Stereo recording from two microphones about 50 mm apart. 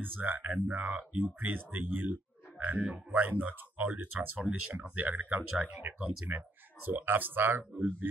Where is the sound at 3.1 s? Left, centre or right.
Right.